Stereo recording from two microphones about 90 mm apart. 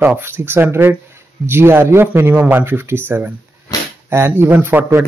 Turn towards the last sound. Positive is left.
turn(degrees=-25)  # may be behind; listen again after turning